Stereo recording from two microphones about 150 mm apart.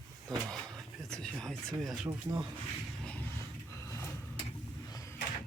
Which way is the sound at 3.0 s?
10° left (ahead or behind).